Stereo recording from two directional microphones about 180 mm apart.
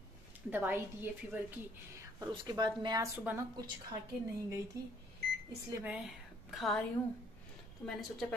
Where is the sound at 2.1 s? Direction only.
20° right (ahead or behind).